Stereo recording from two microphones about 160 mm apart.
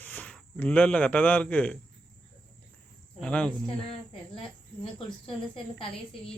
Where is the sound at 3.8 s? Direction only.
35° left (ahead or behind).